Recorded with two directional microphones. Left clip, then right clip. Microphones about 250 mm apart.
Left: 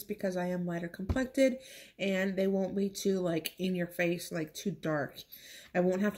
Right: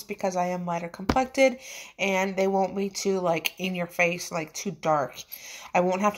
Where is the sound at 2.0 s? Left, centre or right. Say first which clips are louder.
Right 7 dB; centre.